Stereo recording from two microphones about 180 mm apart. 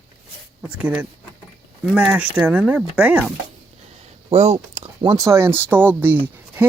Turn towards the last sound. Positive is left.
turn(degrees=-10)  # may be behind; listen again after turning